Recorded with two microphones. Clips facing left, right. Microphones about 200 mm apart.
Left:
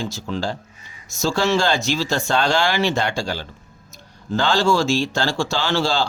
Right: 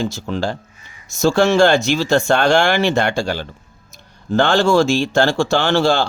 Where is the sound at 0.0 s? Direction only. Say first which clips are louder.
Right 4 dB; 55° right (ahead or behind).